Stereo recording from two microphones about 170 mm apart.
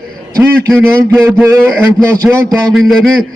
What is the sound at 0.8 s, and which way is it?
A man's voice, 10° right (ahead or behind).